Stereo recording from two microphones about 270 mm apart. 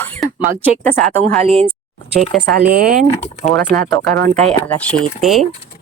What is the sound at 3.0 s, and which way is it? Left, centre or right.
Speech, left.